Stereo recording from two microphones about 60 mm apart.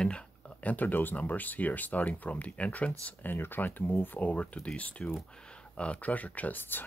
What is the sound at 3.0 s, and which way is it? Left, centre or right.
Speech, left.